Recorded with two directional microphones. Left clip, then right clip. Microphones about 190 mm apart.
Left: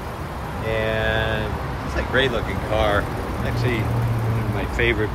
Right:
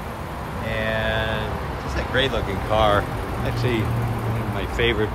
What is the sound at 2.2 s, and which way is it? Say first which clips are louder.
Speech: left 1 dB; 10° right (ahead or behind).